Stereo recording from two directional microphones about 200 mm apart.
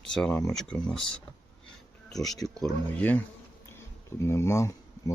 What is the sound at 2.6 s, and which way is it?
Speech, 10° left (ahead or behind).